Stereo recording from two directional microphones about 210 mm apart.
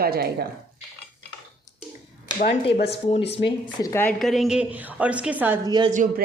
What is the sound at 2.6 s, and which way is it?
Speech, 30° left (ahead or behind).